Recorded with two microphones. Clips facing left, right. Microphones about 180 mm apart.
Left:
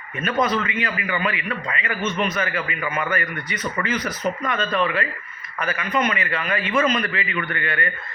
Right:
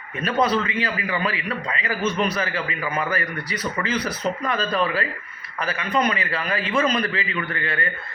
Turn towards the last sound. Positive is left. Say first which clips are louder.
# left 1 dB
turn(degrees=-30)  # may be behind; listen again after turning